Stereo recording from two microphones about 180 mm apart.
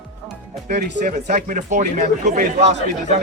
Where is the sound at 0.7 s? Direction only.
60° right (ahead or behind).